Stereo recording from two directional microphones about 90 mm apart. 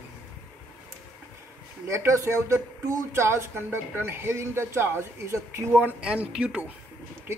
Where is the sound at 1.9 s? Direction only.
30° right (ahead or behind).